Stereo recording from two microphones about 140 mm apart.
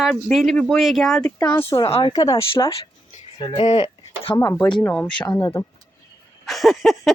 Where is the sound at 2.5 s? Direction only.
40° left (ahead or behind).